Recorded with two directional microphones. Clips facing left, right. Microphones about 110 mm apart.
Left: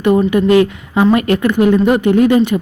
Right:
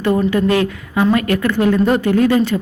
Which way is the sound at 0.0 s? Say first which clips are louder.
Left 3 dB; 15° left (ahead or behind).